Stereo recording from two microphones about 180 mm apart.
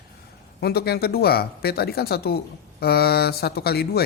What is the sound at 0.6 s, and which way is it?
A man's voice, 60° left (ahead or behind).